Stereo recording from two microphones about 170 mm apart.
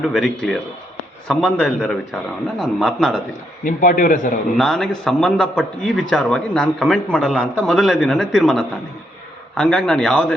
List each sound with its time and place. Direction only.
0.0 s a man's voice: centre (ahead or behind)
3.6 s a man's voice: 50° left (ahead or behind)
4.5 s a man's voice: centre (ahead or behind)